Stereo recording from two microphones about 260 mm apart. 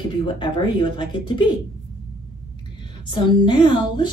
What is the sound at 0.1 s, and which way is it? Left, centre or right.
A woman's voice, centre.